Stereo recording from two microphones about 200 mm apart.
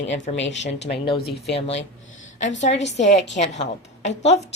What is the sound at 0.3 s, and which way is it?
Speech, 65° left (ahead or behind).